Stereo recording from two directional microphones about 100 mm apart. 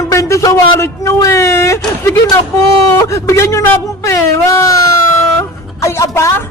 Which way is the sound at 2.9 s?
30° left (ahead or behind).